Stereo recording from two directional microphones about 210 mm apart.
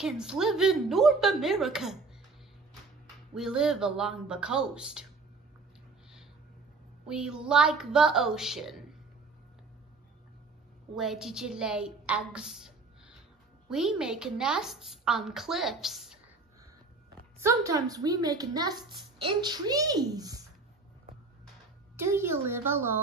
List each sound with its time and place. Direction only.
0.0 s a woman's voice: 5° right (ahead or behind)
3.3 s a woman's voice: 5° right (ahead or behind)
7.1 s a woman's voice: 5° right (ahead or behind)
11.0 s a woman's voice: centre (ahead or behind)
17.4 s a child's voice: 15° right (ahead or behind)
21.9 s a child's voice: 10° right (ahead or behind)